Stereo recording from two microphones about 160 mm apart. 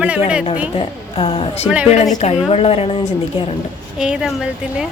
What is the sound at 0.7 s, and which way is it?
A woman's voice, 35° left (ahead or behind).